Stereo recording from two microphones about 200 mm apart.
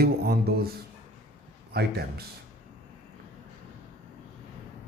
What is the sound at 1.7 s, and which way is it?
Speech, 50° right (ahead or behind).